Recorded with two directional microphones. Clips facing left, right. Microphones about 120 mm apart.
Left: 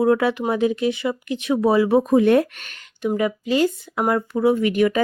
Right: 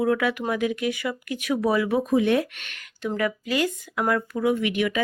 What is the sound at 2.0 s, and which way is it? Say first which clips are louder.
Speech: left 5 dB; 45° left (ahead or behind).